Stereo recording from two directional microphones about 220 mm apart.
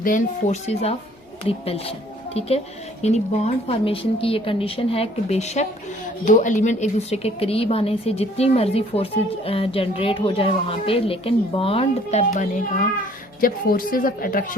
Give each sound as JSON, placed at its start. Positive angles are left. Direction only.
{"t": 0.0, "sound": "a woman's voice", "side_deg": 35}
{"t": 3.0, "sound": "a woman's voice", "side_deg": 30}